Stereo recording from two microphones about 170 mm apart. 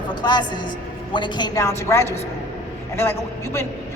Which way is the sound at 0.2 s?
25° left (ahead or behind).